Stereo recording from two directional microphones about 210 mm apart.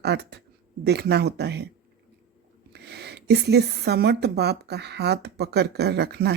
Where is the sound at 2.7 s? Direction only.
50° right (ahead or behind).